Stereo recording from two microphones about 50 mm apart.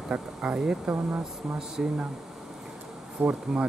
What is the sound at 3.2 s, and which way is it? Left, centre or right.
Speech, right.